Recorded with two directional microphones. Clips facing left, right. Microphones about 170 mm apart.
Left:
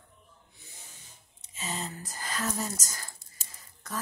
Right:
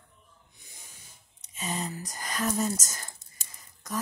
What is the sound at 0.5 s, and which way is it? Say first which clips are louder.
Snake: left 1 dB; 10° right (ahead or behind).